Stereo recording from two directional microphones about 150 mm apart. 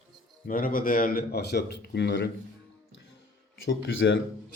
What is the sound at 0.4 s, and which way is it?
Speech, 70° left (ahead or behind).